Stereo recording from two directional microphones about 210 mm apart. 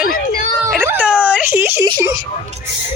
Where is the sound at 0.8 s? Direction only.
5° right (ahead or behind).